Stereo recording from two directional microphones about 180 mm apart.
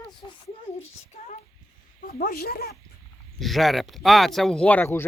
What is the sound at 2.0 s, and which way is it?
Speech, 55° left (ahead or behind).